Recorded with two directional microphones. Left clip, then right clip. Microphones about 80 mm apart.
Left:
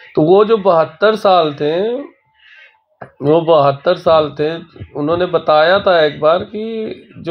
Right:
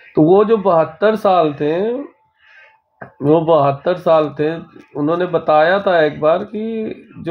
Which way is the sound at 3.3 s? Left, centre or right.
Right.